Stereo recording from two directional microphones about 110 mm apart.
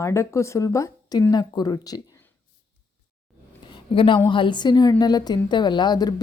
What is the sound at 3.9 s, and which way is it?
A woman's voice, 55° left (ahead or behind).